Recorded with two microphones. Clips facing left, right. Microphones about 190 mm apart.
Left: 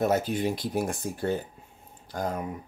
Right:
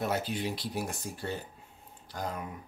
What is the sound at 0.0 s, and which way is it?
Speech, 45° left (ahead or behind).